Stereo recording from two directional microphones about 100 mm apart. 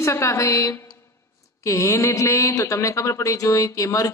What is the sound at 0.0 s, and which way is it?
A man's voice, 30° left (ahead or behind).